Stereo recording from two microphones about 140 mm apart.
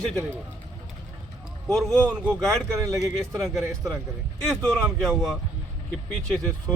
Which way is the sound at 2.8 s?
25° right (ahead or behind).